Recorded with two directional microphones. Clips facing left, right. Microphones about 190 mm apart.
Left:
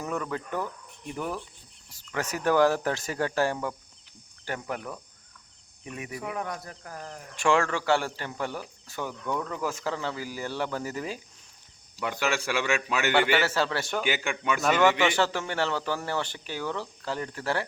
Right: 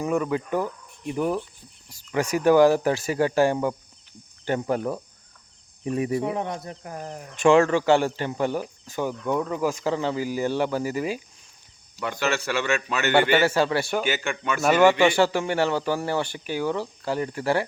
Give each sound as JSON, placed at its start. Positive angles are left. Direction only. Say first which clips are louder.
{"t": 0.0, "sound": "a man's voice", "louder": "right 7 dB", "side_deg": -15}
{"t": 4.4, "sound": "a man's voice", "louder": "right 9 dB", "side_deg": -30}
{"t": 11.9, "sound": "a man's voice", "louder": "right 3 dB", "side_deg": 10}
{"t": 13.4, "sound": "a man's voice", "louder": "right 6 dB", "side_deg": -15}
{"t": 14.0, "sound": "a man's voice", "louder": "right 2 dB", "side_deg": 15}
{"t": 14.6, "sound": "a man's voice", "louder": "right 6 dB", "side_deg": -10}